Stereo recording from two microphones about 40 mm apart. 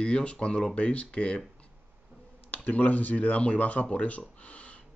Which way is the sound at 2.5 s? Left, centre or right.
Left.